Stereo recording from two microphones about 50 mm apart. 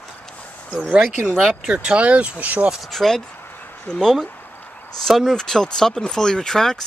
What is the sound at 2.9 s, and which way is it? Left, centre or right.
Speech, centre.